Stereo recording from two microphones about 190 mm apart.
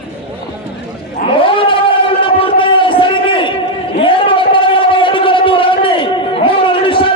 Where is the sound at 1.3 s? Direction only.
25° left (ahead or behind).